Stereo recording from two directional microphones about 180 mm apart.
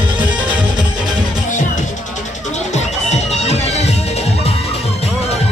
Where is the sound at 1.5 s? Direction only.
45° left (ahead or behind).